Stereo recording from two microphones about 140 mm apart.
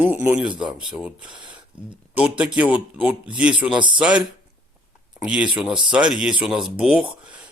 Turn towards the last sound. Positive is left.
turn(degrees=-5)  # may be behind; listen again after turning